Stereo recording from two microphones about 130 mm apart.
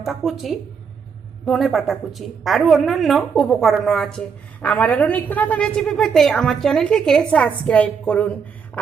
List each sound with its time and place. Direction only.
0.0 s a woman's voice: centre (ahead or behind)